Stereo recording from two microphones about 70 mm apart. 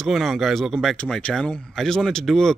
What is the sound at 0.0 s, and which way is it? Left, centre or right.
Speech, centre.